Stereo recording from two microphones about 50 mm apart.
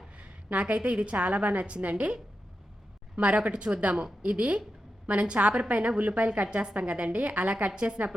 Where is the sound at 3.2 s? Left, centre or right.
Right.